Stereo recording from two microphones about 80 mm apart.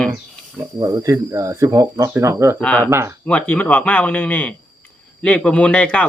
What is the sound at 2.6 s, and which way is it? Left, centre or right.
Speech, centre.